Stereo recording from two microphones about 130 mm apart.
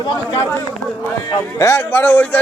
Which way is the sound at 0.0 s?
35° left (ahead or behind).